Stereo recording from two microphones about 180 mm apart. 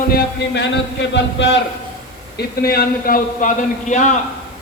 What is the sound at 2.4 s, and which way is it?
A man's voice, 55° left (ahead or behind).